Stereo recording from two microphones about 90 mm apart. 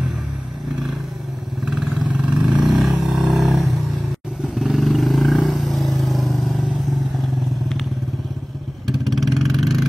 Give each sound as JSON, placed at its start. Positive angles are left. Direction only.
{"t": 1.6, "sound": "vehicle", "side_deg": -5}
{"t": 3.0, "sound": "a sound", "side_deg": 0}
{"t": 3.5, "sound": "vehicle", "side_deg": 0}
{"t": 8.8, "sound": "vehicle", "side_deg": 0}